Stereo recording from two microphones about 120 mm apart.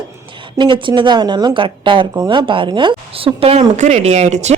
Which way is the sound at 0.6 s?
45° right (ahead or behind).